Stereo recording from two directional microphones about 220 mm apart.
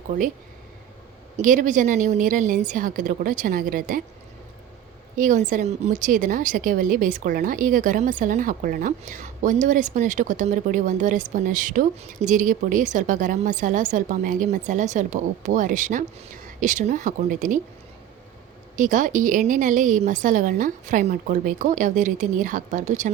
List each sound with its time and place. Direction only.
1.4 s a woman's voice: 35° right (ahead or behind)
5.1 s a woman's voice: 35° right (ahead or behind)
18.8 s a woman's voice: 35° right (ahead or behind)